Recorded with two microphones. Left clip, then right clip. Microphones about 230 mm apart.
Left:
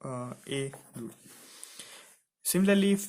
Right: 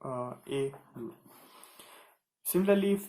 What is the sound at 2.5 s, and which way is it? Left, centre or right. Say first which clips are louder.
Speech: even; left.